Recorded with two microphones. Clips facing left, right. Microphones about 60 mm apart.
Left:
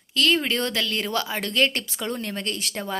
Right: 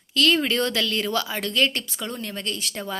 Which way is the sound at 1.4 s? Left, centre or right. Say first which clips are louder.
Even; left.